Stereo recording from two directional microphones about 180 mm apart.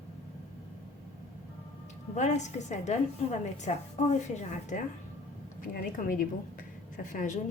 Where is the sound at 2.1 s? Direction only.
40° left (ahead or behind).